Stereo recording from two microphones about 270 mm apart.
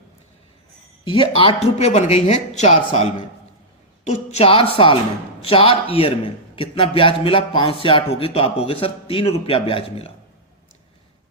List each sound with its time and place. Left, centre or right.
1.0 s speech: centre
4.0 s speech: left